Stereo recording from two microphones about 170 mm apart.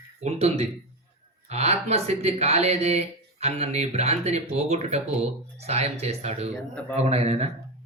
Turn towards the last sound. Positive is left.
turn(degrees=-40)  # may be behind; listen again after turning